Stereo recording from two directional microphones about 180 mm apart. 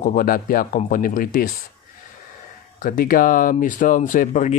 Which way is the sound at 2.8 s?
50° left (ahead or behind).